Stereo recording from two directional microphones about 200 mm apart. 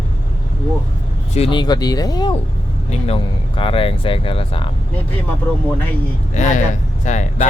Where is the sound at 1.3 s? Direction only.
25° left (ahead or behind).